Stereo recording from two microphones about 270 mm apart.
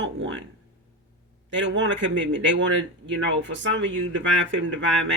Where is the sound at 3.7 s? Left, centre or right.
Right.